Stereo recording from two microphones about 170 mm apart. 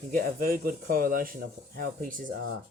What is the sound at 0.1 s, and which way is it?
Speech, 55° right (ahead or behind).